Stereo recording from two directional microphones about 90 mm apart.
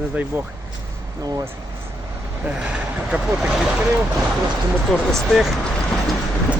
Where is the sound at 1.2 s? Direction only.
40° right (ahead or behind).